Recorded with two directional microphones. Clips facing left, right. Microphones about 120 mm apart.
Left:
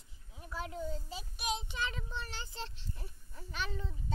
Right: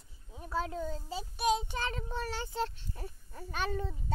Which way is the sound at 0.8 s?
35° right (ahead or behind).